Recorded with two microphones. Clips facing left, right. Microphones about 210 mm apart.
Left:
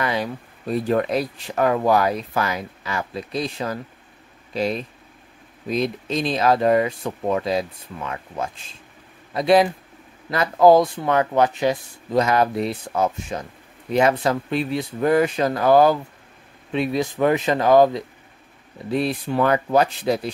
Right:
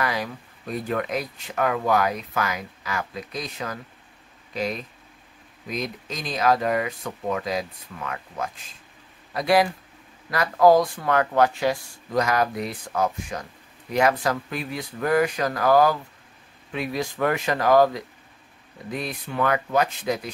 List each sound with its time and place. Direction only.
0.0 s speech: 25° left (ahead or behind)